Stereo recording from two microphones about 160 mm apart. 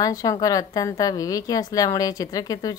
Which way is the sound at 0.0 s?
20° left (ahead or behind).